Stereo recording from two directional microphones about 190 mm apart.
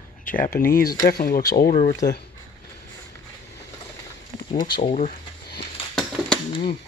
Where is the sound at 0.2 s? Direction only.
45° left (ahead or behind).